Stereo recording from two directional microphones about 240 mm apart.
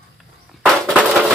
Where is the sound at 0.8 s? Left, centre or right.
Centre.